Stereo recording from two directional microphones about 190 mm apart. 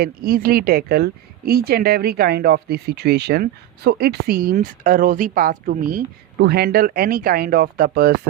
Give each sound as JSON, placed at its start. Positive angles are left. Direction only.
{"t": 0.0, "sound": "speech", "side_deg": -50}
{"t": 6.4, "sound": "speech", "side_deg": -55}